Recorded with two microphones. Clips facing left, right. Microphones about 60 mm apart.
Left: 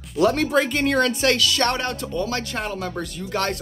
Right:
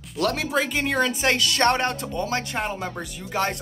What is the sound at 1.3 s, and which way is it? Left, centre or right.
Speech, right.